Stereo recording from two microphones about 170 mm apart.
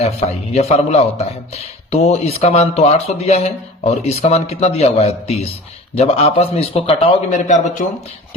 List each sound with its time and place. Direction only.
0.0 s a man's voice: 40° left (ahead or behind)